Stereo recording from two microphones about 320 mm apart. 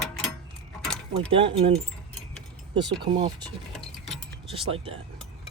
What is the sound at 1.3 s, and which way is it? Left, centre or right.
Speech, centre.